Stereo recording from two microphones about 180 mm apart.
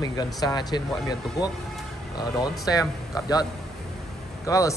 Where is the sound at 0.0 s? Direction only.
20° left (ahead or behind).